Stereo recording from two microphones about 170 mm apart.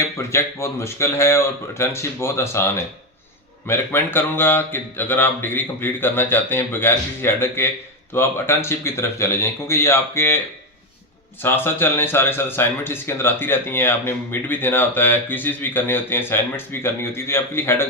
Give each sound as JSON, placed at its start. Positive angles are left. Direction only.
{"t": 0.0, "sound": "speech", "side_deg": 15}
{"t": 3.7, "sound": "speech", "side_deg": 15}
{"t": 11.4, "sound": "speech", "side_deg": 15}